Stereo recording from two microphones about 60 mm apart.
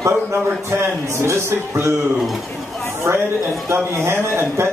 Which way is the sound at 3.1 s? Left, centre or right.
Right.